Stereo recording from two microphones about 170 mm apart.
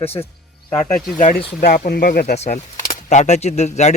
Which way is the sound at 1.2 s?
60° left (ahead or behind).